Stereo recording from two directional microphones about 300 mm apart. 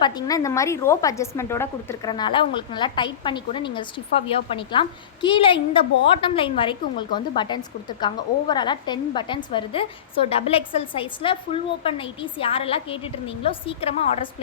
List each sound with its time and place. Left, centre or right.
0.0 s speech: centre